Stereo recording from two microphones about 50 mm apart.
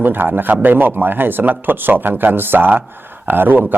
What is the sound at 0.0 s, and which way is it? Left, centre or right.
Speech, right.